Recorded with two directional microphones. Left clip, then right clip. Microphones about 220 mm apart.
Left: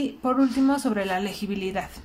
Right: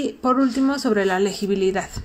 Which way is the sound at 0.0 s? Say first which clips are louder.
Right 4 dB; 15° right (ahead or behind).